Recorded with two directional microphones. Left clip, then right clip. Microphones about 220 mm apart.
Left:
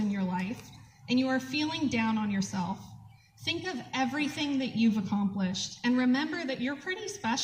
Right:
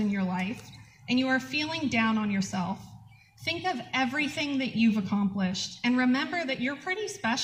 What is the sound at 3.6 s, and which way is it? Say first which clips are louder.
A woman's voice: right 4 dB; 20° right (ahead or behind).